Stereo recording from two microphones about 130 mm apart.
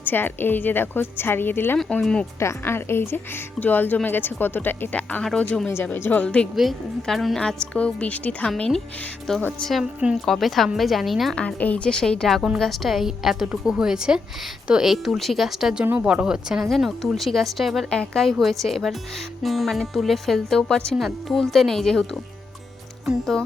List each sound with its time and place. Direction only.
0.0 s a woman's voice: 15° left (ahead or behind)
2.4 s a woman's voice: 20° left (ahead or behind); by 22.2 s 5° left (ahead or behind)